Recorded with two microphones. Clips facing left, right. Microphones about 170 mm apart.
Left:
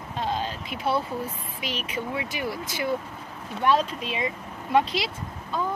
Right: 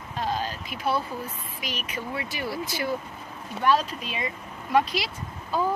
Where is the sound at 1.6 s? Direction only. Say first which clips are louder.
Left 3 dB; 25° left (ahead or behind).